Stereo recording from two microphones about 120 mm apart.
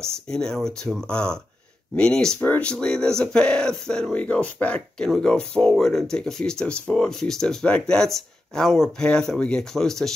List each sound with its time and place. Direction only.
0.1 s speech: 5° left (ahead or behind)